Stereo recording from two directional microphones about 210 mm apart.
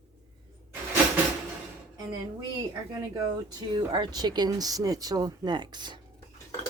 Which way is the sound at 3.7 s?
20° right (ahead or behind).